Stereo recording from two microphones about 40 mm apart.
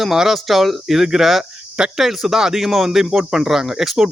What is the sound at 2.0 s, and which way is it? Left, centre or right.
Speech, centre.